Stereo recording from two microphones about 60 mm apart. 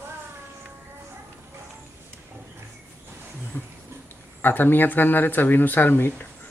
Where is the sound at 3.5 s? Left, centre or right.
Left.